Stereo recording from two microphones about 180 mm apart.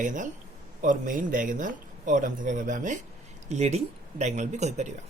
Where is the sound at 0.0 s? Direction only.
45° right (ahead or behind).